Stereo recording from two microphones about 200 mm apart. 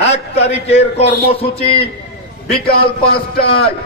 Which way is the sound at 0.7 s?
30° left (ahead or behind).